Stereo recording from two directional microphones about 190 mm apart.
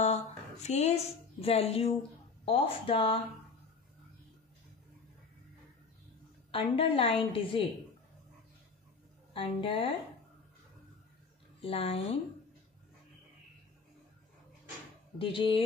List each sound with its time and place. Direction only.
0.0 s a woman's voice: 35° left (ahead or behind)
6.5 s a woman's voice: 30° left (ahead or behind)
9.3 s a woman's voice: 25° left (ahead or behind)
11.6 s speech: 30° left (ahead or behind)
15.1 s a woman's voice: 25° left (ahead or behind)